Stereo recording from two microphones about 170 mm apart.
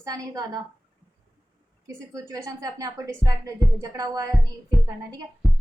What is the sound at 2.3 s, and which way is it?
A woman's voice, 20° right (ahead or behind).